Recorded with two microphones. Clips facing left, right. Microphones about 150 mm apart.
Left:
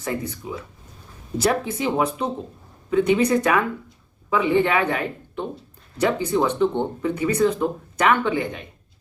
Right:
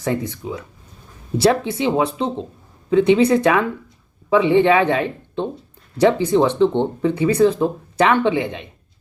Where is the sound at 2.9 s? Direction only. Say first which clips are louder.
Right 4 dB; 30° right (ahead or behind).